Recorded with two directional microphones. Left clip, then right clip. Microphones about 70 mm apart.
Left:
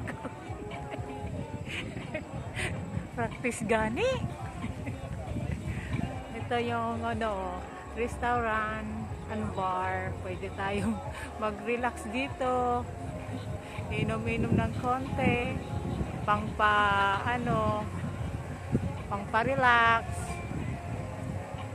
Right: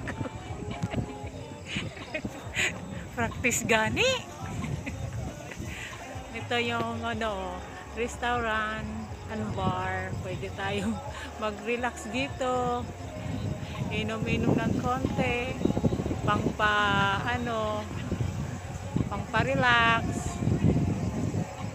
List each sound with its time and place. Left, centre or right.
2.1 s a sound: right
3.2 s speech: right
6.5 s speech: right
9.6 s speech: right
11.4 s speech: right
13.8 s speech: right
19.0 s speech: right